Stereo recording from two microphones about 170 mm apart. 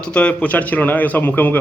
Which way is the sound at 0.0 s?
5° left (ahead or behind).